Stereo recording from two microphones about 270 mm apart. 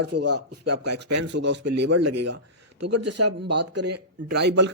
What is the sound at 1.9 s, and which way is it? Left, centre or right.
Speech, right.